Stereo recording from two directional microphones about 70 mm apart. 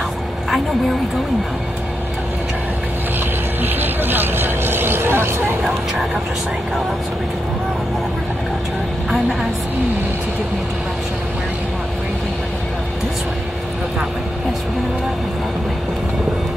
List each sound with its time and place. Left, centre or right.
3.6 s speech: right